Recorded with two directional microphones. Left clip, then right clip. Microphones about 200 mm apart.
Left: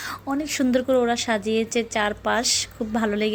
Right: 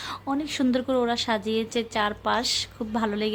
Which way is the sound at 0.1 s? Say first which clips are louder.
Left 1 dB; centre (ahead or behind).